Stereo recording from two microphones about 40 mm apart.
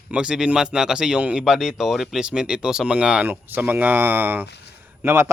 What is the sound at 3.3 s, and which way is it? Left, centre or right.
Speech, right.